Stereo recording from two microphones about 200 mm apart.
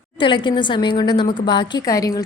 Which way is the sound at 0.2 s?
25° left (ahead or behind).